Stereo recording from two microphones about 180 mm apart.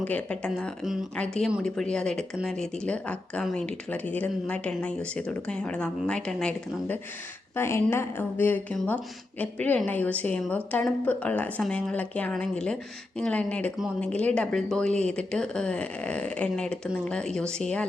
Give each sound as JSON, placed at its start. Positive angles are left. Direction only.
{"t": 0.0, "sound": "a woman's voice", "side_deg": 5}